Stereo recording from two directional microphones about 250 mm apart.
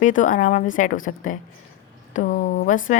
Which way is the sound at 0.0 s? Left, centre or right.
Left.